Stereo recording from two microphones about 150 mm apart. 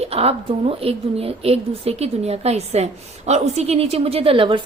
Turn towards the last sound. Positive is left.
turn(degrees=-35)  # may be behind; listen again after turning